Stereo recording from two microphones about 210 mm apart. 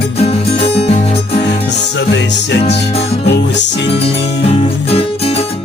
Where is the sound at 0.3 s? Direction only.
30° left (ahead or behind).